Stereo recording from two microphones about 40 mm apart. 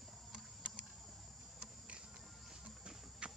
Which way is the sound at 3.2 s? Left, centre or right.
Right.